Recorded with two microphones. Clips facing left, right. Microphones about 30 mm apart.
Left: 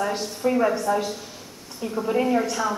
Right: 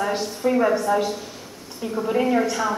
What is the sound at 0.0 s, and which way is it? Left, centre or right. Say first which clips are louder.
A woman's voice: right 2 dB; centre.